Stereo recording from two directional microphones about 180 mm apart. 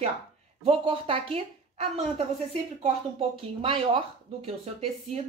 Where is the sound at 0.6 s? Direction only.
30° right (ahead or behind).